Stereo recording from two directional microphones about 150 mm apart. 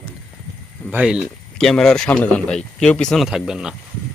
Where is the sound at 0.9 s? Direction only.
10° right (ahead or behind).